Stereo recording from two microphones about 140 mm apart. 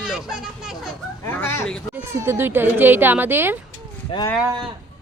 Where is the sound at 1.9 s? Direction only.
15° right (ahead or behind).